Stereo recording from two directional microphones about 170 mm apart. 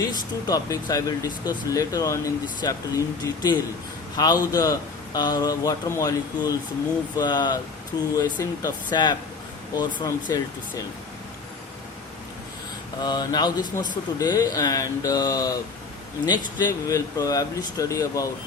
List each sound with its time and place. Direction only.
0.1 s speech: 25° left (ahead or behind)
4.2 s speech: 25° left (ahead or behind)
13.0 s speech: 25° left (ahead or behind)